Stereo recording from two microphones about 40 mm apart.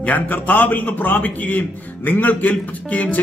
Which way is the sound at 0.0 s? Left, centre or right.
Left.